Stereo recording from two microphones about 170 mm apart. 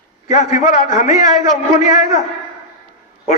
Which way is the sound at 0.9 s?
20° right (ahead or behind).